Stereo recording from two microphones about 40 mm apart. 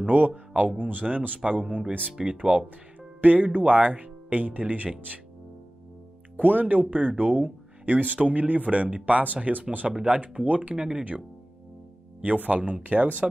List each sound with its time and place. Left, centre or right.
0.0 s speech: right
2.2 s speech: centre
3.2 s speech: right
6.3 s speech: right
12.2 s speech: right